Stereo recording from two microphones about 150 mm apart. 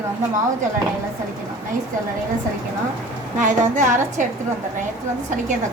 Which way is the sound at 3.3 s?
55° right (ahead or behind).